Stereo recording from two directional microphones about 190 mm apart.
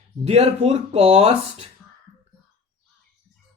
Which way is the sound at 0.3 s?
35° right (ahead or behind).